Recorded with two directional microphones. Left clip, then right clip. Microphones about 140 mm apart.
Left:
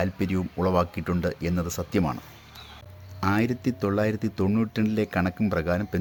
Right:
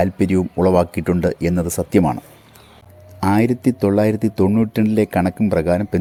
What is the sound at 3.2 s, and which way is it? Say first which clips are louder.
Speech: right 8 dB; 35° right (ahead or behind).